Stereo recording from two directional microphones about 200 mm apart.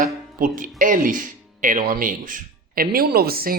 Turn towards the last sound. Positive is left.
turn(degrees=-50)  # may be behind; listen again after turning